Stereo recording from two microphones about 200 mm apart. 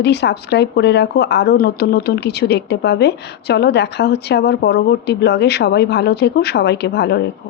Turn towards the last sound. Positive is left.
turn(degrees=55)  # may be behind; listen again after turning